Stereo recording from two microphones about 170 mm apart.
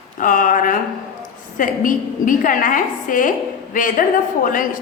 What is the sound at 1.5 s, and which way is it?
A woman's voice, 50° left (ahead or behind).